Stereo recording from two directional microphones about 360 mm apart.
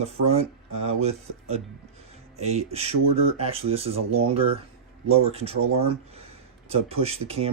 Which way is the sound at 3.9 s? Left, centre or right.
Right.